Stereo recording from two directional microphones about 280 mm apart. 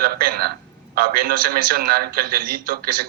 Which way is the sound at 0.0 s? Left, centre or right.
Right.